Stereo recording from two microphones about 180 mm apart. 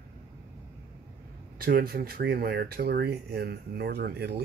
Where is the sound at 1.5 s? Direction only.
55° right (ahead or behind).